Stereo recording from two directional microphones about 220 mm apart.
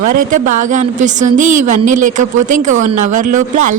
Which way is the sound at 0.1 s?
35° right (ahead or behind).